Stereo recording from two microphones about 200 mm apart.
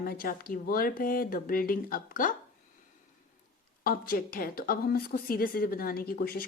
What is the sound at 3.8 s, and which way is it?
Speech, 45° left (ahead or behind).